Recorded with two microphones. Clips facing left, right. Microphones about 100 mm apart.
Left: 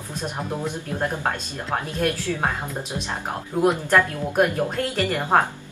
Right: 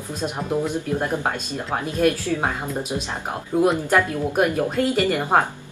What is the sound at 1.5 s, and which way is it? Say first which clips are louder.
Speech: right 2 dB; 15° right (ahead or behind).